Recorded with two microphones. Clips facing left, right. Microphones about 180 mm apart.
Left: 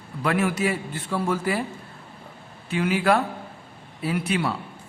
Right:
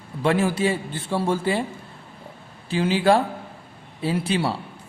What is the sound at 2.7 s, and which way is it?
A man's voice, 30° right (ahead or behind).